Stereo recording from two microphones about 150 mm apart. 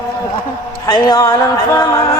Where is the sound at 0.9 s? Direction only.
25° left (ahead or behind).